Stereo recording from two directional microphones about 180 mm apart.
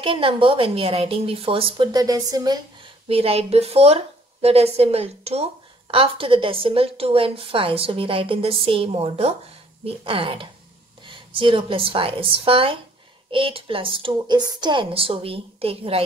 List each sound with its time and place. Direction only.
0.0 s a woman's voice: 30° right (ahead or behind)
3.1 s a woman's voice: 30° right (ahead or behind)